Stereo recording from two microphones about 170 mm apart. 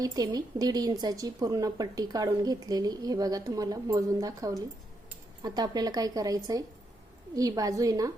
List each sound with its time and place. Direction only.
0.0 s a woman's voice: 25° right (ahead or behind)